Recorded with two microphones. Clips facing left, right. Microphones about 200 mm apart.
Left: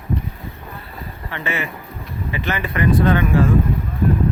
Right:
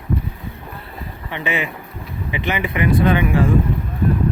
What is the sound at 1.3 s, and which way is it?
Speech, 15° right (ahead or behind).